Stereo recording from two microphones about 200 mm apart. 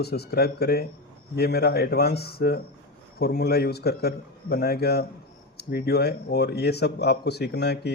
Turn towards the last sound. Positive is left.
turn(degrees=55)  # may be behind; listen again after turning